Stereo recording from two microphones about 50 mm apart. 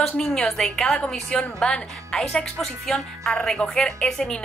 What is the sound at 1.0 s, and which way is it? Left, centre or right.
Speech, left.